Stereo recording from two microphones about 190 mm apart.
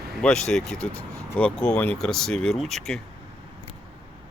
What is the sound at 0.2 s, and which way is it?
Speech, 5° left (ahead or behind).